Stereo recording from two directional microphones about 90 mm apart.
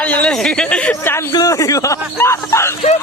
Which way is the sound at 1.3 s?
40° left (ahead or behind).